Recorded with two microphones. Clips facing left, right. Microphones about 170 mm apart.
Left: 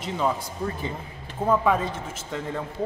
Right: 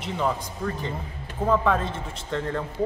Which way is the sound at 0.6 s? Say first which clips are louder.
Even; 30° left (ahead or behind).